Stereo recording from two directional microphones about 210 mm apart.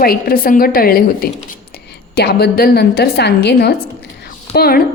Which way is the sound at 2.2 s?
50° left (ahead or behind).